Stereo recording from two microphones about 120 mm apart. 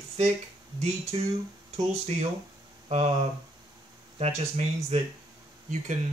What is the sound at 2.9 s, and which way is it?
Speech, 65° right (ahead or behind).